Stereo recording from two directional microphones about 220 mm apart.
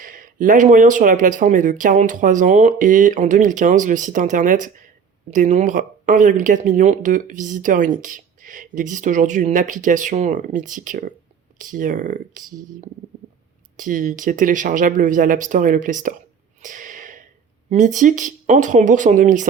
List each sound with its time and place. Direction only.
0.0 s speech: 40° right (ahead or behind)
16.6 s a sound: 35° right (ahead or behind)
17.7 s speech: 35° right (ahead or behind)